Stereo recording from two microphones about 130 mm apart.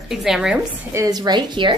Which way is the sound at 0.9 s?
30° right (ahead or behind).